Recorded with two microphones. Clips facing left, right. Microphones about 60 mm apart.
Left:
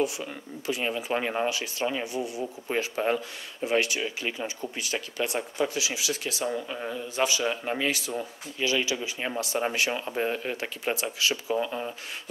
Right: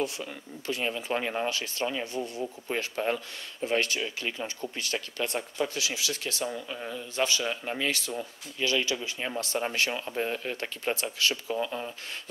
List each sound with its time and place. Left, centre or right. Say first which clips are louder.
0.0 s speech: left 4 dB; centre